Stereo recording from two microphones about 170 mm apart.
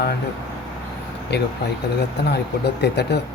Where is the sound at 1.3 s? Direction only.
85° left.